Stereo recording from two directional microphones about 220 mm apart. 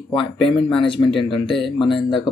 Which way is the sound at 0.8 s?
25° left (ahead or behind).